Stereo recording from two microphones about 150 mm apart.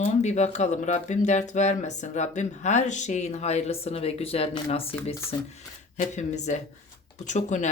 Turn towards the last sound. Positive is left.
turn(degrees=55)  # may be behind; listen again after turning